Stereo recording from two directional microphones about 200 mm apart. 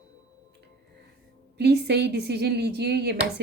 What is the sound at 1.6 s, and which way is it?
Speech, 55° right (ahead or behind).